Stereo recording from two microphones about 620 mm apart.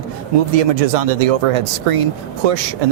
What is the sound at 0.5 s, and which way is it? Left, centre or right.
Speech, right.